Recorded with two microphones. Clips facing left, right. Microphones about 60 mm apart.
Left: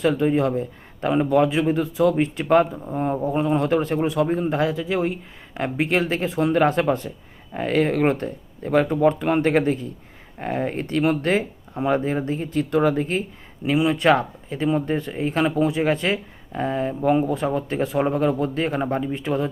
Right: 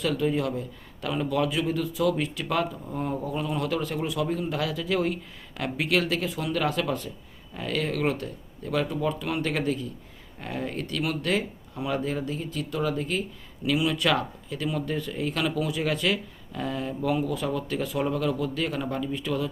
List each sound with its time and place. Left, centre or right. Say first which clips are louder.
0.0 s speech: left 6 dB; left